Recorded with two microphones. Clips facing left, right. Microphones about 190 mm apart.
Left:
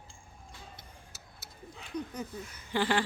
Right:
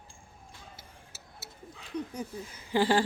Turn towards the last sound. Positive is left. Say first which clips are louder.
# right 4 dB
turn(degrees=-35)  # may be behind; listen again after turning